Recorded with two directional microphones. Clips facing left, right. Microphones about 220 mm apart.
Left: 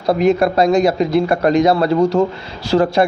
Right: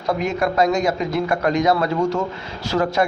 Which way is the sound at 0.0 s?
35° left (ahead or behind).